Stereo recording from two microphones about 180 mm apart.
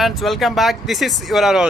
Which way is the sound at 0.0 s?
Centre (ahead or behind).